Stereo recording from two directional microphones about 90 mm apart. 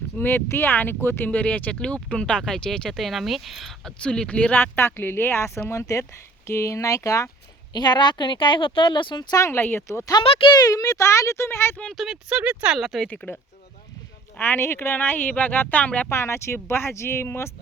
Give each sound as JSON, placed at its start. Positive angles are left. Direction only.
{"t": 0.2, "sound": "speech", "side_deg": 25}
{"t": 4.0, "sound": "a child's voice", "side_deg": 10}
{"t": 7.7, "sound": "speech", "side_deg": 55}
{"t": 9.3, "sound": "a child's voice", "side_deg": 35}
{"t": 9.6, "sound": "speech", "side_deg": 20}
{"t": 10.2, "sound": "speech", "side_deg": 90}
{"t": 10.5, "sound": "a child's voice", "side_deg": 40}
{"t": 11.8, "sound": "speech", "side_deg": 0}
{"t": 12.3, "sound": "speech", "side_deg": -15}
{"t": 12.7, "sound": "speech", "side_deg": 0}
{"t": 13.1, "sound": "speech", "side_deg": 20}
{"t": 16.1, "sound": "speech", "side_deg": 30}